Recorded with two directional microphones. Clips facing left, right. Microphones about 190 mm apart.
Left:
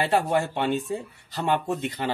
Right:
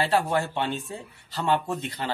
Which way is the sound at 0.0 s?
15° left (ahead or behind).